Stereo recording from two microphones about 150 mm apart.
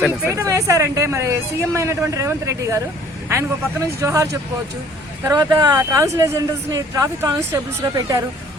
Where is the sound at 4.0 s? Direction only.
20° right (ahead or behind).